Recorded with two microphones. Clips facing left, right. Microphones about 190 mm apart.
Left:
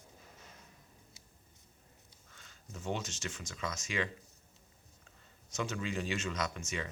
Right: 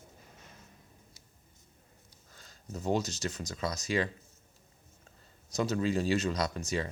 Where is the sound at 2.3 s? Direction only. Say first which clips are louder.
Right 8 dB; 35° right (ahead or behind).